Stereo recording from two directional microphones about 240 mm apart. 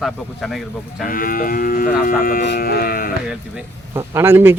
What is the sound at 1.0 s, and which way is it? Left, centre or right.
Speech, left.